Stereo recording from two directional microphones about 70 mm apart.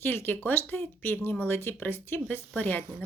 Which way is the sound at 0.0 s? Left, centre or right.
Left.